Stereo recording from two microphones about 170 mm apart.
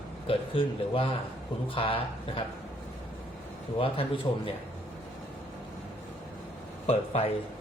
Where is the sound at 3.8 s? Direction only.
30° left (ahead or behind).